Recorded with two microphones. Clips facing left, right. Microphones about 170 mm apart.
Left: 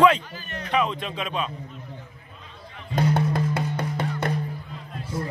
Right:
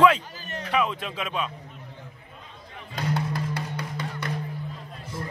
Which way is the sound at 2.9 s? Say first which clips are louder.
Left 6 dB; 50° left (ahead or behind).